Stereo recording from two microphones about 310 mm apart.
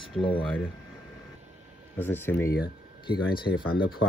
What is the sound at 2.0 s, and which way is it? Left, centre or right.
Speech, centre.